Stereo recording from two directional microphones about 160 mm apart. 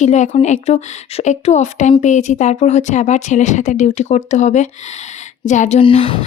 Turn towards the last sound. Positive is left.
turn(degrees=35)  # may be behind; listen again after turning